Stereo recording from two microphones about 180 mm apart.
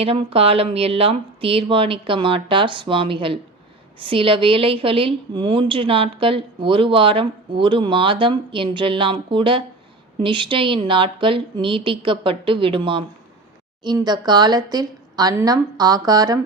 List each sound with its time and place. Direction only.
0.0 s a woman's voice: 35° right (ahead or behind)